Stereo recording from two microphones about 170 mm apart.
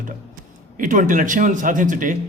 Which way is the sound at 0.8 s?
50° right (ahead or behind).